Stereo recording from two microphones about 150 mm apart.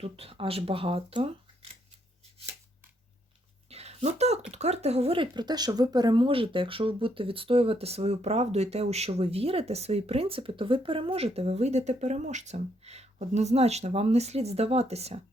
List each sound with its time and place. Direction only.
0.0 s speech: 40° right (ahead or behind)
3.7 s a sound: 45° right (ahead or behind)
4.5 s speech: 45° right (ahead or behind)